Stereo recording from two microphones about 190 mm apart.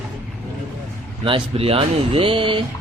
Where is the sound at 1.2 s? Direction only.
30° right (ahead or behind).